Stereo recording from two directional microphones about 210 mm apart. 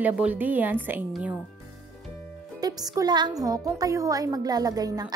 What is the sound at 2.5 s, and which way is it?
Speech, 20° right (ahead or behind).